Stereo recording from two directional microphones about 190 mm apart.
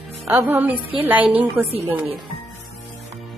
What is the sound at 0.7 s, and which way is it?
Speech, 25° right (ahead or behind).